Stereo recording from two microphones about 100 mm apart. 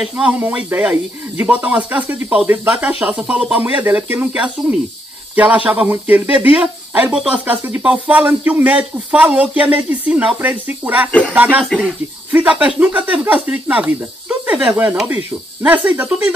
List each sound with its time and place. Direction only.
0.0 s speech: 15° right (ahead or behind)
11.1 s music: 15° left (ahead or behind)
11.3 s speech: 15° right (ahead or behind)
14.4 s snake: 15° right (ahead or behind)
15.0 s speech: 15° right (ahead or behind)